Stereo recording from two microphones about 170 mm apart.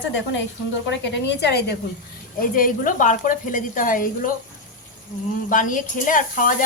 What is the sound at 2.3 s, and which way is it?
Speech, 55° left (ahead or behind).